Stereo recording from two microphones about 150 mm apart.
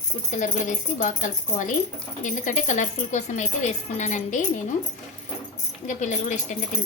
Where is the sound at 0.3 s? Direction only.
55° left (ahead or behind).